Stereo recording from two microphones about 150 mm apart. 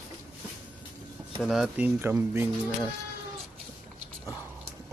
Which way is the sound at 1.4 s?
5° right (ahead or behind).